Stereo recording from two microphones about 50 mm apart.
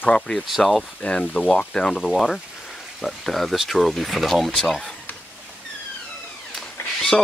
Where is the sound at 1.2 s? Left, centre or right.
Left.